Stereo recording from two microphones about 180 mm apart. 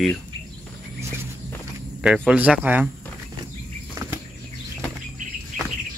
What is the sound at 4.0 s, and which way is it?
Bird flight, 20° right (ahead or behind).